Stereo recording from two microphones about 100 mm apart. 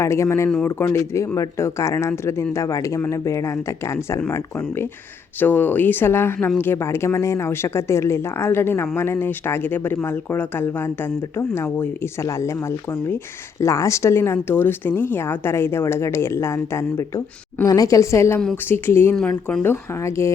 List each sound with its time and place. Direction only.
0.0 s speech: 30° left (ahead or behind)
5.4 s speech: 20° left (ahead or behind)
19.1 s speech: 15° left (ahead or behind); by 20.3 s 30° left (ahead or behind)